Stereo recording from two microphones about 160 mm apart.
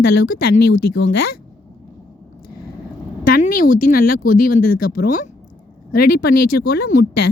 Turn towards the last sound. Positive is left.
turn(degrees=85)